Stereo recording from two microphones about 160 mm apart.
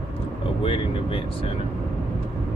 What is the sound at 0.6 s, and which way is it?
Speech, 35° left (ahead or behind).